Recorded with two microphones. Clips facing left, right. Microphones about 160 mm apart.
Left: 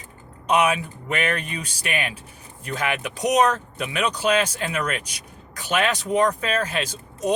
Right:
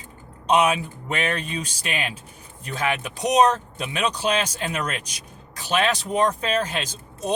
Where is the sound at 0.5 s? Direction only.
25° right (ahead or behind).